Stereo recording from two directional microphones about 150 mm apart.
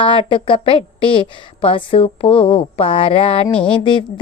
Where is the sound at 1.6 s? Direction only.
35° left (ahead or behind).